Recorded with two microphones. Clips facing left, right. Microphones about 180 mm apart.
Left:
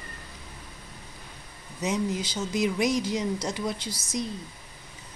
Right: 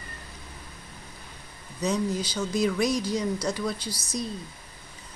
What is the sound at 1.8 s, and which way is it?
Speech, 20° left (ahead or behind).